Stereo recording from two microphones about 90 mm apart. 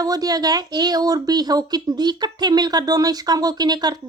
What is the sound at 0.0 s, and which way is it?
Speech, 45° right (ahead or behind).